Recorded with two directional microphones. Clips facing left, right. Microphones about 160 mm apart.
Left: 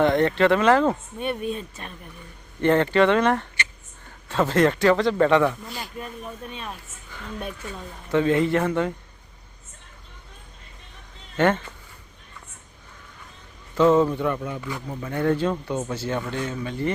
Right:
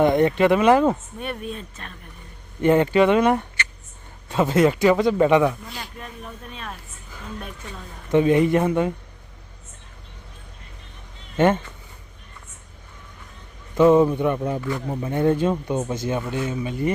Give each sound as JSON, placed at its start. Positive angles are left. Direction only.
{"t": 0.0, "sound": "a man's voice", "side_deg": -15}
{"t": 1.2, "sound": "speech", "side_deg": 0}
{"t": 2.6, "sound": "a man's voice", "side_deg": -10}
{"t": 5.6, "sound": "speech", "side_deg": 5}
{"t": 8.1, "sound": "a man's voice", "side_deg": -15}
{"t": 11.3, "sound": "speech", "side_deg": -10}
{"t": 13.7, "sound": "a man's voice", "side_deg": -15}